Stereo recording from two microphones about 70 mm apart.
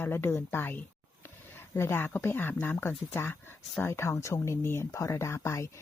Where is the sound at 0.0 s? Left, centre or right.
Left.